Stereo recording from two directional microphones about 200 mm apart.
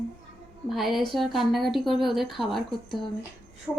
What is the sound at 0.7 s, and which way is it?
A woman's voice, centre (ahead or behind).